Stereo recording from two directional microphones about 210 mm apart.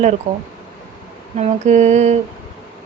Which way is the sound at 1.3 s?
35° right (ahead or behind).